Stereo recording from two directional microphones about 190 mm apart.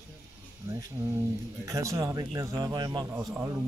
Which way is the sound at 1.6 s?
15° right (ahead or behind).